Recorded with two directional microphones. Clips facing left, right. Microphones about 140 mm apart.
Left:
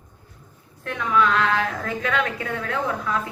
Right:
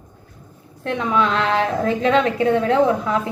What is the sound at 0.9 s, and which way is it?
A woman's voice, 25° right (ahead or behind).